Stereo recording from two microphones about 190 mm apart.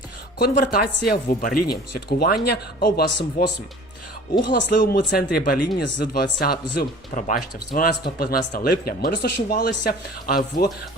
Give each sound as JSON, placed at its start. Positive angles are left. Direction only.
{"t": 0.3, "sound": "speech", "side_deg": 55}
{"t": 4.5, "sound": "speech", "side_deg": 45}